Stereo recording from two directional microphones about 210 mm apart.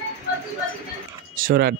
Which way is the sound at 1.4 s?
45° right (ahead or behind).